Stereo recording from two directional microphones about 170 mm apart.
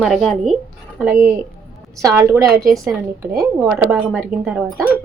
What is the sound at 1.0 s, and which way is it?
A woman's voice, 15° right (ahead or behind).